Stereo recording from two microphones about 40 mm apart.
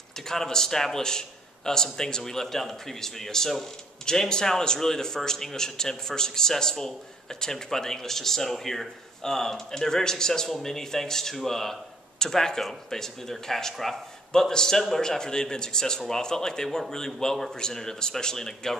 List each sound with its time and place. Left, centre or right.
0.3 s speech: centre